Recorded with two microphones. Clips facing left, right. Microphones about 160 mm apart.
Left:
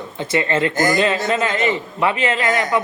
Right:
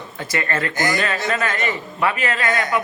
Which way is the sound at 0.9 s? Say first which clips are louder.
Left 4 dB; 20° left (ahead or behind).